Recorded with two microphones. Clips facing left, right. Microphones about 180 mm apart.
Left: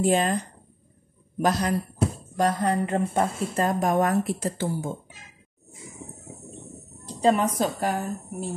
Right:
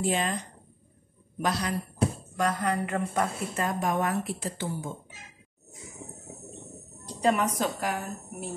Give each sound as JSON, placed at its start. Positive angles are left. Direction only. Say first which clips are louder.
{"t": 0.0, "sound": "speech", "louder": "left 6 dB", "side_deg": 45}
{"t": 1.4, "sound": "speech", "louder": "left 5 dB", "side_deg": 45}
{"t": 2.3, "sound": "a woman's voice", "louder": "left 7 dB", "side_deg": 30}
{"t": 7.2, "sound": "a woman's voice", "louder": "left 4 dB", "side_deg": 30}